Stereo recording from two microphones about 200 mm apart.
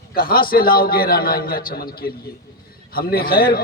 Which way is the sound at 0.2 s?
45° left (ahead or behind).